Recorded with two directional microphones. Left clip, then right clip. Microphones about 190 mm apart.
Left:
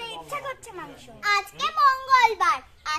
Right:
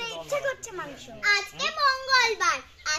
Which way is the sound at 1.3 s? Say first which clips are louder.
Left 1 dB; 10° left (ahead or behind).